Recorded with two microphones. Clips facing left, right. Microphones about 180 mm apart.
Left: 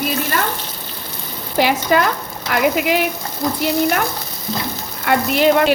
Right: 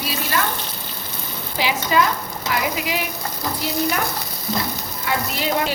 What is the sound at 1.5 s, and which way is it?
Frying, 55° left (ahead or behind).